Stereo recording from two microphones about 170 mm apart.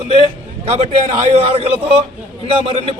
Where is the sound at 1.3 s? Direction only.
35° right (ahead or behind).